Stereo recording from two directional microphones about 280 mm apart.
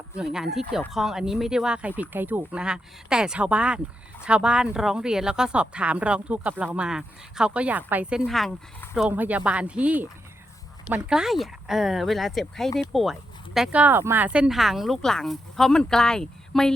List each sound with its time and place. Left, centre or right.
0.5 s speech: centre